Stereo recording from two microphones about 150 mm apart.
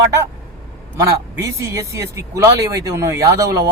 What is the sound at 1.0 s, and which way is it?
Speech, 20° right (ahead or behind).